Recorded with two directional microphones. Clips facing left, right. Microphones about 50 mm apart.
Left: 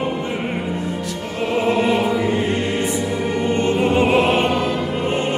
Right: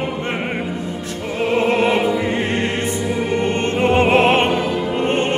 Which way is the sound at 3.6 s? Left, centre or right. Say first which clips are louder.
Even; right.